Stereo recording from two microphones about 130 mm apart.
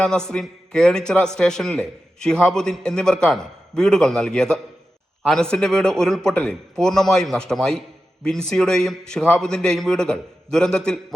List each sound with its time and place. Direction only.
0.0 s a man's voice: 5° left (ahead or behind)